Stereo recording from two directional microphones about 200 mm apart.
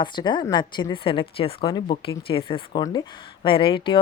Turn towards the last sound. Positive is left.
turn(degrees=25)  # may be behind; listen again after turning